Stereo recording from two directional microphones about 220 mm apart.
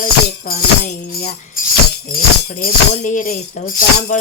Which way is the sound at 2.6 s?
35° left (ahead or behind).